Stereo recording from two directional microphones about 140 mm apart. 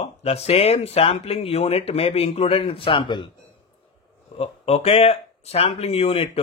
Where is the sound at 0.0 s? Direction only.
45° left (ahead or behind).